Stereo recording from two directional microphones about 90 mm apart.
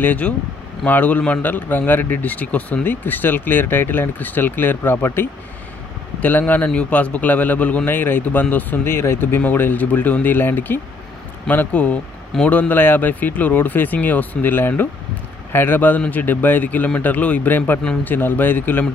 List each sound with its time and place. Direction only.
0.0 s a man's voice: 20° left (ahead or behind)